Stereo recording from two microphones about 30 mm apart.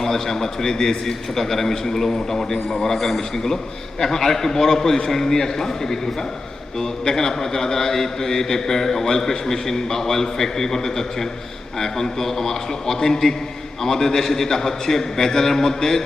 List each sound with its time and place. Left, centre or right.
0.0 s a man's voice: centre
7.0 s a man's voice: centre